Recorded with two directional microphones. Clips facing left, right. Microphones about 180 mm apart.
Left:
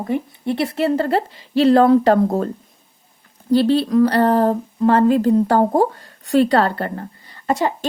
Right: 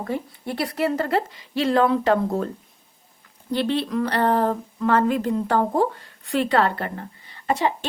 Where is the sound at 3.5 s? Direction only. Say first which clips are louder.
Left 8 dB; 35° left (ahead or behind).